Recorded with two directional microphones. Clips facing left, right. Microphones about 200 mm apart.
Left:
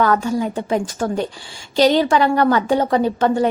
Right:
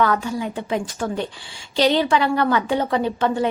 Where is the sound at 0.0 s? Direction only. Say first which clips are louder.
Left 3 dB; 45° left (ahead or behind).